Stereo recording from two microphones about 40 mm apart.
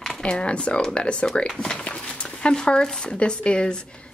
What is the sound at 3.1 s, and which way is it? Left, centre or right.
Speech, left.